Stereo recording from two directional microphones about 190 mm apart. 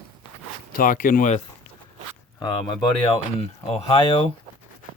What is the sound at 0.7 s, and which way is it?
Speech, 45° left (ahead or behind).